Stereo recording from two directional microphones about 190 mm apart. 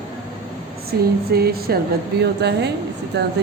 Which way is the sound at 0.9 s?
55° right (ahead or behind).